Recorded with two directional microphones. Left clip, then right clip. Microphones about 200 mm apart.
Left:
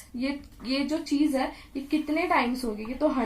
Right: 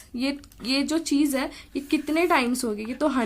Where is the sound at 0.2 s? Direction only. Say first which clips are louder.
Right 3 dB; 45° right (ahead or behind).